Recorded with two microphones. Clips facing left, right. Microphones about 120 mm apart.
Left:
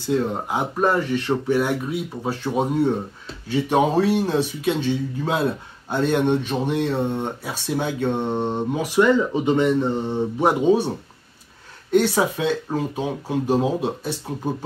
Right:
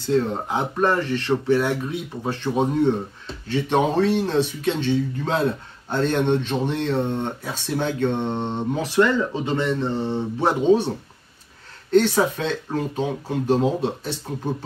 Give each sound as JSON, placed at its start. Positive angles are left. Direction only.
{"t": 0.1, "sound": "speech", "side_deg": 10}
{"t": 11.9, "sound": "speech", "side_deg": 10}